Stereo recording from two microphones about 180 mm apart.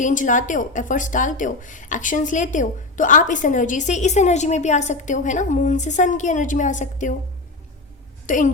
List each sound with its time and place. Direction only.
0.0 s speech: 45° left (ahead or behind)
8.3 s speech: 45° left (ahead or behind)